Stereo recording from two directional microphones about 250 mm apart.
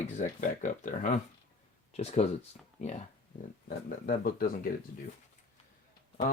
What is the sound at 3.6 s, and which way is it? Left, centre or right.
Speech, left.